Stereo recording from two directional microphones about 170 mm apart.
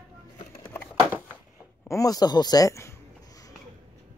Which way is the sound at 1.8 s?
20° left (ahead or behind).